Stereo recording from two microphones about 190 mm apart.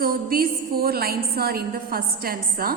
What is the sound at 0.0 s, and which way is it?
A woman's voice, 50° right (ahead or behind).